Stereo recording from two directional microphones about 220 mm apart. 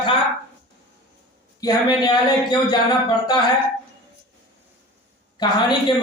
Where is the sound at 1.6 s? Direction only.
20° left (ahead or behind).